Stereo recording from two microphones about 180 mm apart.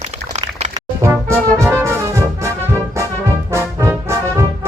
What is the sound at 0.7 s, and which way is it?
Brass instrument, 15° right (ahead or behind).